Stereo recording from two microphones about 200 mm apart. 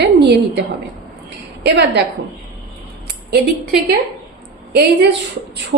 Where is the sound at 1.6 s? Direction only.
55° right (ahead or behind).